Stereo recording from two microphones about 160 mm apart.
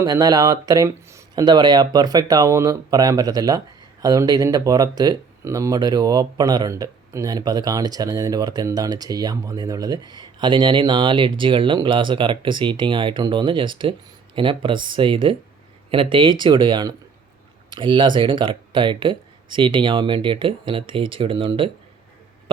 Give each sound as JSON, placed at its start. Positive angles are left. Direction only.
{"t": 0.0, "sound": "speech", "side_deg": -20}